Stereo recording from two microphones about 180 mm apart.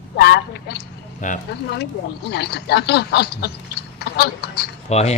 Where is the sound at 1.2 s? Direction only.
45° left (ahead or behind).